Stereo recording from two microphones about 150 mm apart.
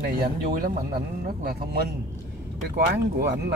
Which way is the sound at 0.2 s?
80° right.